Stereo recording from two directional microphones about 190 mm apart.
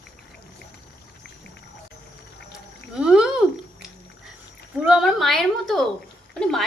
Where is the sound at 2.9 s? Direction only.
5° right (ahead or behind).